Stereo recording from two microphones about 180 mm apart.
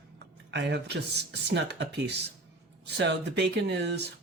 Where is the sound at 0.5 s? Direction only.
70° right (ahead or behind).